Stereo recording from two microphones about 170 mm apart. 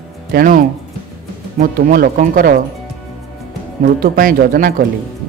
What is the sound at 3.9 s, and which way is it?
Speech, 55° right (ahead or behind).